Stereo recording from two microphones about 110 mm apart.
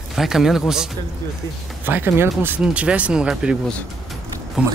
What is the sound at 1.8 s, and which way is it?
Speech, 20° right (ahead or behind).